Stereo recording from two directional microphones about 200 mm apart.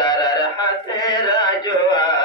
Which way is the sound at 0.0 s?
20° left (ahead or behind).